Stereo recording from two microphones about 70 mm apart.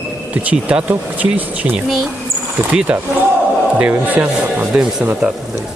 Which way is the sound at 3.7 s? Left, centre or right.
Centre.